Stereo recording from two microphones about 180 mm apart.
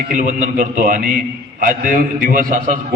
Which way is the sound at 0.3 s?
45° right (ahead or behind).